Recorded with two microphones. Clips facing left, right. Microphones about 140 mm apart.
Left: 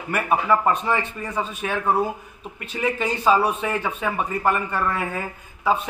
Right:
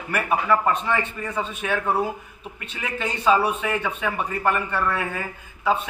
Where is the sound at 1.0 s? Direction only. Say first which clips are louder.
Even; 10° left (ahead or behind).